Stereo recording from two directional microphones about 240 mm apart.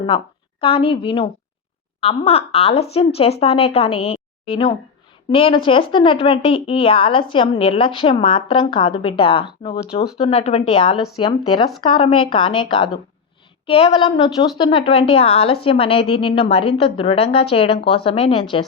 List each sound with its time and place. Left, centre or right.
0.6 s a woman's voice: left
10.9 s speech: centre
11.2 s a woman's voice: centre